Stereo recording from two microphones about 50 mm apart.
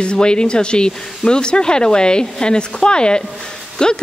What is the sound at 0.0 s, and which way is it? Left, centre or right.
A woman's voice, centre.